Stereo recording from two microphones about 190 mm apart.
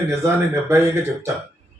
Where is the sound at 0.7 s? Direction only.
15° right (ahead or behind).